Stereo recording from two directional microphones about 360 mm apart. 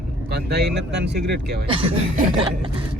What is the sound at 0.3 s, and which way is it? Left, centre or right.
Speech, right.